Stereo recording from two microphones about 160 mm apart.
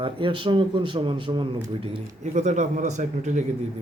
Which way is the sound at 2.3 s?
50° right (ahead or behind).